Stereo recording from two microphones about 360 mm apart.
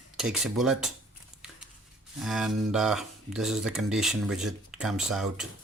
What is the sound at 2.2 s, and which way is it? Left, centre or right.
Speech, centre.